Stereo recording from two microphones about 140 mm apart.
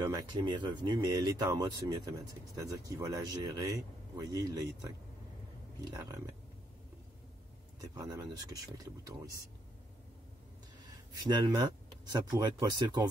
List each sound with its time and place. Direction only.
0.0 s speech: 30° right (ahead or behind)
7.8 s speech: 25° right (ahead or behind)
11.1 s speech: 30° right (ahead or behind)